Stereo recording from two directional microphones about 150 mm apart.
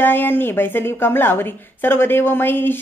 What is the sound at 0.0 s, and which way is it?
A woman's voice, 15° left (ahead or behind).